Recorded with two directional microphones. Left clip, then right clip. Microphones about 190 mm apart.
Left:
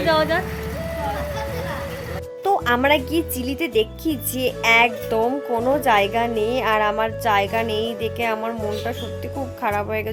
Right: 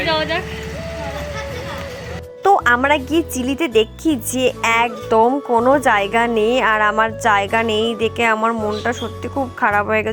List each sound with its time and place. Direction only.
0.0 s speech: 15° left (ahead or behind)
2.4 s music: 20° right (ahead or behind)
3.2 s speech: 5° right (ahead or behind)
4.6 s speech: 15° right (ahead or behind)